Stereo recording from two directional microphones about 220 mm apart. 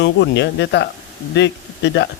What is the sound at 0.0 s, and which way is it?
A man's voice, 50° left (ahead or behind).